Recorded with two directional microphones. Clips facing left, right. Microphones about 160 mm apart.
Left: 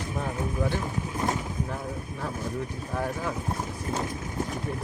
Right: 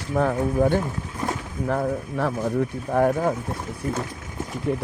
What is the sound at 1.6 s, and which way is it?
Speech, 85° right.